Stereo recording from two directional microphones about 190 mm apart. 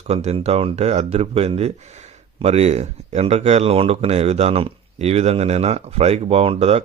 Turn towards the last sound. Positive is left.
turn(degrees=-30)  # may be behind; listen again after turning